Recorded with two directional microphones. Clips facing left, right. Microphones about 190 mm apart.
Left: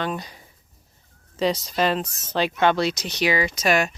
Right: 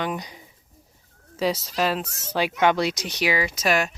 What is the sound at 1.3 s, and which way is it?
Speech, 5° right (ahead or behind).